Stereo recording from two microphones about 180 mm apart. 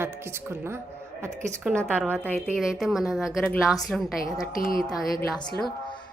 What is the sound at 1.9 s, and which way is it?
A woman's voice, 5° left (ahead or behind).